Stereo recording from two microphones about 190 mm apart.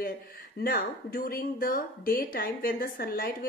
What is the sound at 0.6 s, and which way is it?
Speech, 50° left (ahead or behind).